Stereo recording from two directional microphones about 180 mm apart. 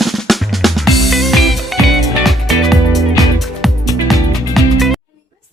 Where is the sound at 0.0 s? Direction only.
Centre (ahead or behind).